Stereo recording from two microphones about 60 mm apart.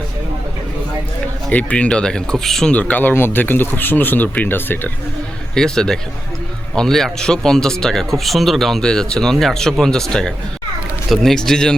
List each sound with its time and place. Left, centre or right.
1.5 s speech: left
2.7 s speech: left
5.5 s speech: centre